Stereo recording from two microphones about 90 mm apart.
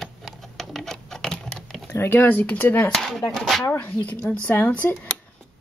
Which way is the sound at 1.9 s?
20° left (ahead or behind).